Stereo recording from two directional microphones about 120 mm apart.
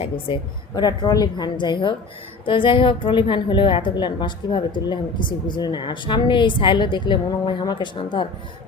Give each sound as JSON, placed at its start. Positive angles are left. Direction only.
{"t": 0.8, "sound": "a woman's voice", "side_deg": 35}